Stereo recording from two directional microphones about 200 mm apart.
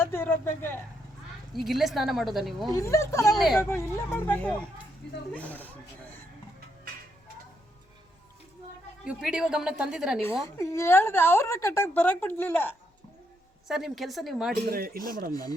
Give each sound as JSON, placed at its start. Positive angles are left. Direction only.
{"t": 0.0, "sound": "a woman's voice", "side_deg": 10}
{"t": 1.5, "sound": "a woman's voice", "side_deg": 0}
{"t": 2.7, "sound": "a woman's voice", "side_deg": 15}
{"t": 3.3, "sound": "a woman's voice", "side_deg": 0}
{"t": 3.6, "sound": "a woman's voice", "side_deg": 15}
{"t": 9.0, "sound": "a woman's voice", "side_deg": -5}
{"t": 10.6, "sound": "a woman's voice", "side_deg": 15}
{"t": 13.7, "sound": "a woman's voice", "side_deg": 0}
{"t": 14.7, "sound": "speech", "side_deg": -50}
{"t": 15.3, "sound": "speech", "side_deg": 20}